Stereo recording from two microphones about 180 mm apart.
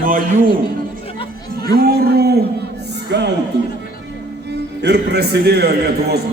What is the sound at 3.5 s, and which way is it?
Speech, 85° right.